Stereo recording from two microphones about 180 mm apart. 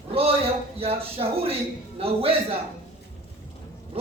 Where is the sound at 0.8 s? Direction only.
35° right (ahead or behind).